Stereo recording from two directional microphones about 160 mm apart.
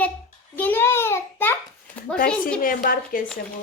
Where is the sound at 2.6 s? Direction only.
65° left (ahead or behind).